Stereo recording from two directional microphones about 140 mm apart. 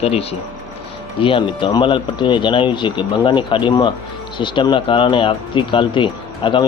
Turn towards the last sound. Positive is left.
turn(degrees=35)  # may be behind; listen again after turning